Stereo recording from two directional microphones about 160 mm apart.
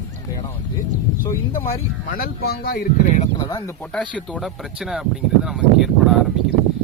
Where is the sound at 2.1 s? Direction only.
70° left (ahead or behind).